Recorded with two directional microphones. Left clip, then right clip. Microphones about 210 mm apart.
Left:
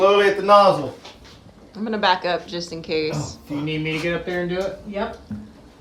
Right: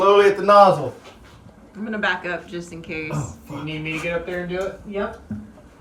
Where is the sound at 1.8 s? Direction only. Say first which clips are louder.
Left 4 dB; 20° left (ahead or behind).